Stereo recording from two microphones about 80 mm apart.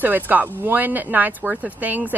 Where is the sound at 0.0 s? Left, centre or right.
Right.